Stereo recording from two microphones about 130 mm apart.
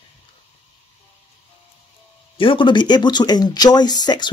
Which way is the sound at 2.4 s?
40° left (ahead or behind).